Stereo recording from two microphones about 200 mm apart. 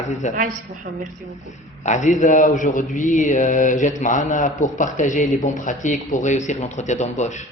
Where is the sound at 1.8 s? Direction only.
35° left (ahead or behind).